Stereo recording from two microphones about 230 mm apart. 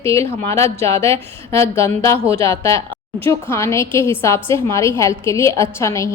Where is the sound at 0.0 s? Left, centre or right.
Centre.